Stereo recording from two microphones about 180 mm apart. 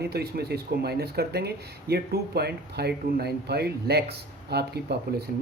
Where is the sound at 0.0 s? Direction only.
60° right (ahead or behind).